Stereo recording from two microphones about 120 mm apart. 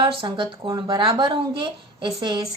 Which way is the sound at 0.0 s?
45° right (ahead or behind).